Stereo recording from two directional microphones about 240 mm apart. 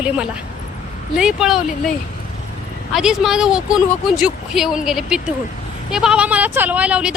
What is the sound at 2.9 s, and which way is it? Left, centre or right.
Speech, centre.